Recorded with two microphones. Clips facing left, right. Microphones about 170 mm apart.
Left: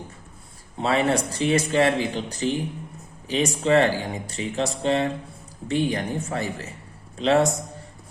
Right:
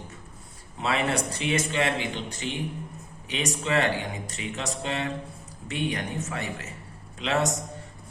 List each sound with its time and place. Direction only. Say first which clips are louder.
0.8 s speech: left 5 dB; 30° left (ahead or behind)